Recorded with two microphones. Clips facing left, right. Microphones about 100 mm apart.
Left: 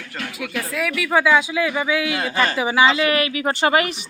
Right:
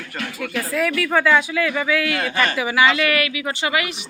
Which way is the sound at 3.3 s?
45° left (ahead or behind).